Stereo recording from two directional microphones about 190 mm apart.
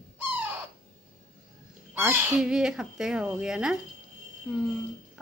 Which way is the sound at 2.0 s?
10° right (ahead or behind).